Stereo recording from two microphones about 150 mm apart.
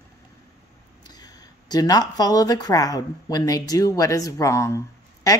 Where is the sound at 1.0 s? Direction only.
25° left (ahead or behind).